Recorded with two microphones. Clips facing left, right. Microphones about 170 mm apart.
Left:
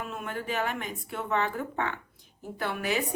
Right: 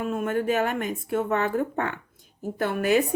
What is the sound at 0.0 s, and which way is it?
Speech, 50° right (ahead or behind).